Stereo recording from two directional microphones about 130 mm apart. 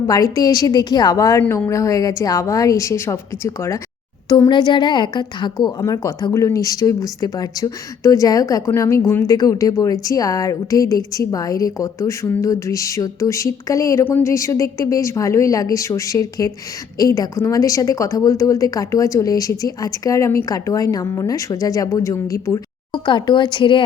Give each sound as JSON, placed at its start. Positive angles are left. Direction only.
{"t": 0.1, "sound": "a woman's voice", "side_deg": 30}
{"t": 4.3, "sound": "a woman's voice", "side_deg": 30}
{"t": 22.5, "sound": "speech", "side_deg": 35}